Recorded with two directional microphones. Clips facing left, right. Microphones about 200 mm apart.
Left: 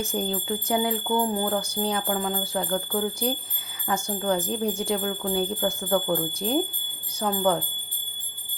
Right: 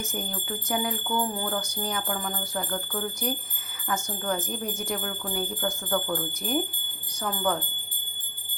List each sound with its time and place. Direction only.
0.1 s speech: 25° left (ahead or behind)
4.4 s speech: 30° left (ahead or behind)